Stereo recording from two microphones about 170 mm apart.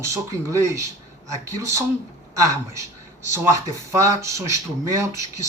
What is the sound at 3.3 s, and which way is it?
Speech, 15° right (ahead or behind).